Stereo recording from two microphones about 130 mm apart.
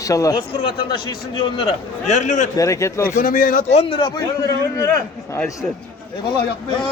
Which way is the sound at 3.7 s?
45° left (ahead or behind).